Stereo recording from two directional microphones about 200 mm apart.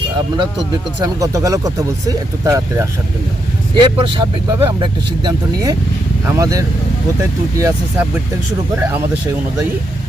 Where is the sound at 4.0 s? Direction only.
25° right (ahead or behind).